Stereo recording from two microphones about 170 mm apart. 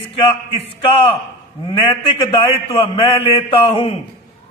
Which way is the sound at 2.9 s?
35° left (ahead or behind).